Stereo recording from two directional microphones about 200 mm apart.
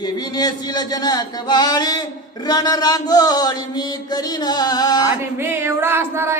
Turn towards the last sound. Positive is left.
turn(degrees=-10)  # may be behind; listen again after turning